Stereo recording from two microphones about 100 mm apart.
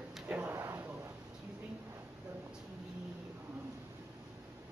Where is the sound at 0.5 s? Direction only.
25° right (ahead or behind).